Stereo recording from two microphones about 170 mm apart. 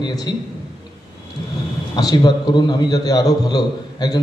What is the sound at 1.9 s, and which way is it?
A man's voice, 25° left (ahead or behind).